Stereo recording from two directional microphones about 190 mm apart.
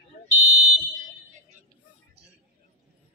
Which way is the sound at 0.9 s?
40° right (ahead or behind).